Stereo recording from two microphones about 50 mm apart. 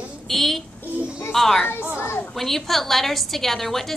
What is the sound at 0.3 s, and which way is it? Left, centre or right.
Child singing, centre.